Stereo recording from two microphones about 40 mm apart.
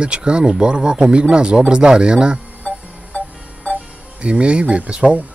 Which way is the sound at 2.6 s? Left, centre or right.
Left.